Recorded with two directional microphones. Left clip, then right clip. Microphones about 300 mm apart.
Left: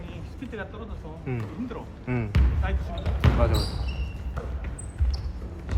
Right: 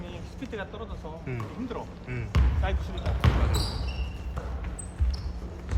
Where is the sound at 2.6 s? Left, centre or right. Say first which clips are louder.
Right 3 dB; right.